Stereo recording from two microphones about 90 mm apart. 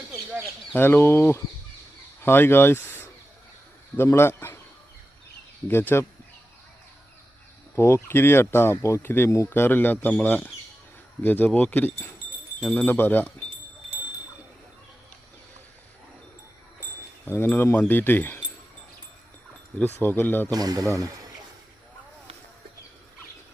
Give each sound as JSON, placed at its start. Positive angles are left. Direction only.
{"t": 0.7, "sound": "speech", "side_deg": 25}
{"t": 3.9, "sound": "speech", "side_deg": 25}
{"t": 5.6, "sound": "speech", "side_deg": 25}
{"t": 7.8, "sound": "speech", "side_deg": 30}
{"t": 17.2, "sound": "speech", "side_deg": 25}
{"t": 20.0, "sound": "speech", "side_deg": 20}
{"t": 20.5, "sound": "speech", "side_deg": -45}